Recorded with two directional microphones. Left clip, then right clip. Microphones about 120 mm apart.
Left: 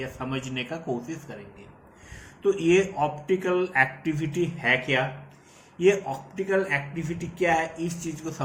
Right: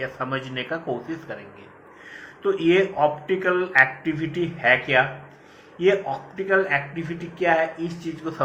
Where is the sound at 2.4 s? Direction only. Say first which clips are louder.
Right 2 dB; 20° left (ahead or behind).